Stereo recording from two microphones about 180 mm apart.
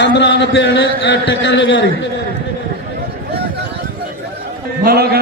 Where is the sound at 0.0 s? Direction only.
75° left (ahead or behind).